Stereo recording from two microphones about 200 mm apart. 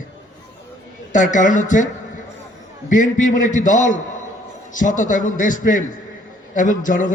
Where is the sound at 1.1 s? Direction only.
40° left (ahead or behind).